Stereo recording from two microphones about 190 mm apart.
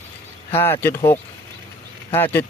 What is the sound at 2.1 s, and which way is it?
Speech, 10° left (ahead or behind).